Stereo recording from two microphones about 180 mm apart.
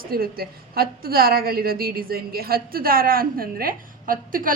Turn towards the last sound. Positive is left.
turn(degrees=-50)  # may be behind; listen again after turning